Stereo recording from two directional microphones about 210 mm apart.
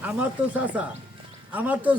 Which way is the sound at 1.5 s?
10° right (ahead or behind).